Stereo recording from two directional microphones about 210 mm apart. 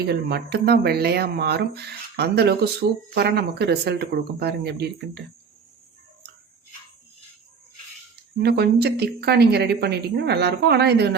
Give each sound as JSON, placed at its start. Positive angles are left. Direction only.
{"t": 0.1, "sound": "speech", "side_deg": -50}
{"t": 8.4, "sound": "speech", "side_deg": -50}